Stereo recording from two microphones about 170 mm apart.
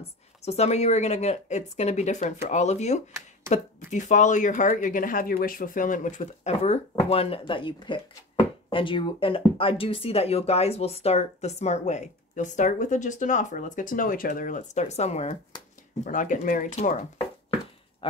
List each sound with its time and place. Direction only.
0.0 s speech: 40° left (ahead or behind)